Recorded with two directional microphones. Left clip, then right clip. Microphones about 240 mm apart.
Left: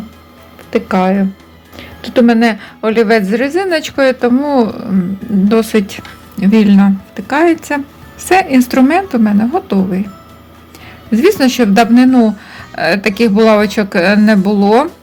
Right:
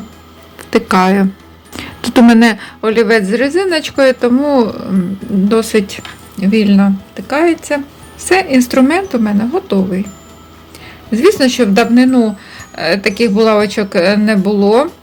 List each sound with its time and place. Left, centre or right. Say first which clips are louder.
0.7 s a woman's voice: right 2 dB; centre
11.1 s speech: even; centre